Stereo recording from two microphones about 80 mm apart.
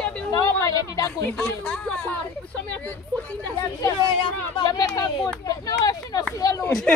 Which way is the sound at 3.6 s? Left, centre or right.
Left.